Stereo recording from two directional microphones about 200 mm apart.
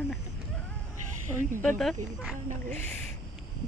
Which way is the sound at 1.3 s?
5° left (ahead or behind).